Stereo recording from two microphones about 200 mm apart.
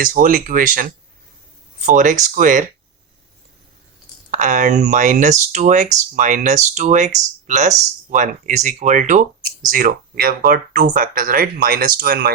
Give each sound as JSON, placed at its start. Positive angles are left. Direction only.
{"t": 0.0, "sound": "speech", "side_deg": -45}
{"t": 4.3, "sound": "speech", "side_deg": -40}